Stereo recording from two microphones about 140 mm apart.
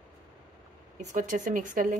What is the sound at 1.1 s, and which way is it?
Speech, 70° right (ahead or behind).